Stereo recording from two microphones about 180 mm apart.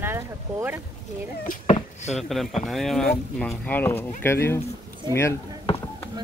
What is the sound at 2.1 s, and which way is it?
Speech, centre (ahead or behind).